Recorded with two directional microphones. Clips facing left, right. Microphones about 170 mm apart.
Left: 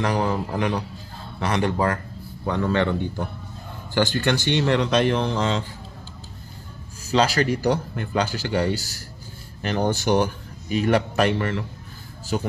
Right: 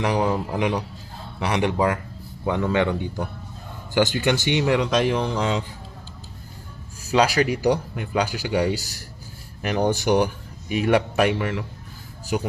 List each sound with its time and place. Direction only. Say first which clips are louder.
0.0 s speech: right 1 dB; 10° right (ahead or behind)
7.1 s speech: right 1 dB; 15° right (ahead or behind)